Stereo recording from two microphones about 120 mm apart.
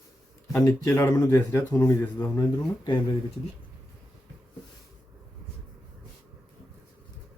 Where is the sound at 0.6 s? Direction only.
25° left (ahead or behind).